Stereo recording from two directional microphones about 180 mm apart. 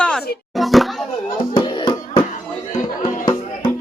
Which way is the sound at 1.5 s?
25° left (ahead or behind).